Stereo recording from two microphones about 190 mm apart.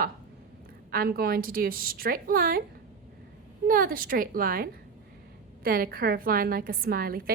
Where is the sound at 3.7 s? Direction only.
50° right (ahead or behind).